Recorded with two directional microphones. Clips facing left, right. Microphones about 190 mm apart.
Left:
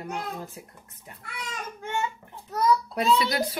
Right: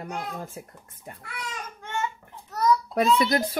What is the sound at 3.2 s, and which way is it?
Speech, 50° right (ahead or behind).